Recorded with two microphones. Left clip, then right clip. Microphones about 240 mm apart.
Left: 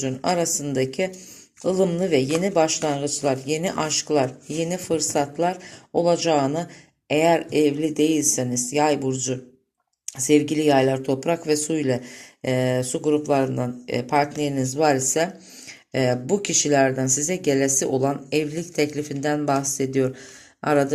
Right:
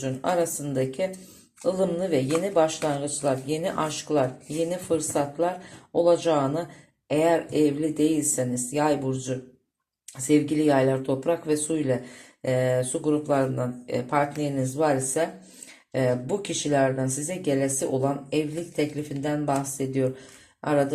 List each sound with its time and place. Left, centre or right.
0.0 s speech: left